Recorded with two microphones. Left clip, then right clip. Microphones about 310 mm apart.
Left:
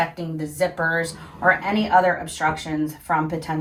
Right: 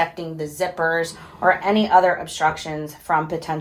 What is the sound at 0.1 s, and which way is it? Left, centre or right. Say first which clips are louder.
Speech: right 2 dB; centre.